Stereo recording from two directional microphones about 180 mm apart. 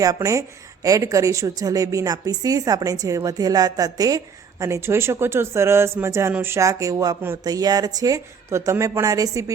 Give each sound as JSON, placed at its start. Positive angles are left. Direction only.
{"t": 0.0, "sound": "a woman's voice", "side_deg": -20}